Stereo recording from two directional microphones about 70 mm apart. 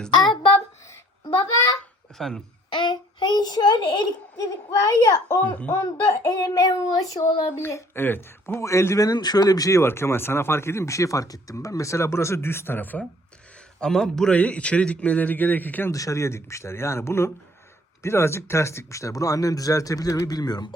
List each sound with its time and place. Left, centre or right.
1.2 s speech: left
2.1 s speech: centre
2.7 s child singing: left
5.0 s child singing: left
5.7 s speech: left
6.3 s child singing: left
7.4 s speech: left
8.6 s speech: left
9.0 s speech: left
9.7 s speech: left
13.7 s a man's voice: centre; by 15.9 s left
15.9 s speech: left